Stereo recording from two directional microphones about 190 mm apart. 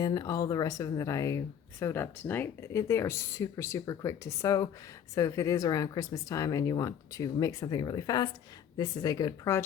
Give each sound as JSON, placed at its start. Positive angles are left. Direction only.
{"t": 0.0, "sound": "speech", "side_deg": 20}